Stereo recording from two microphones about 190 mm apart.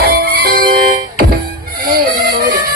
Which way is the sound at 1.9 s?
50° right (ahead or behind).